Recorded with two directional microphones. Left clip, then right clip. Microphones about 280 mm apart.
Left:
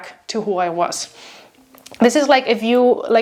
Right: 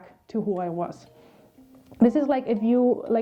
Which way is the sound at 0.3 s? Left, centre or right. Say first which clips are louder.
Left 9 dB; centre.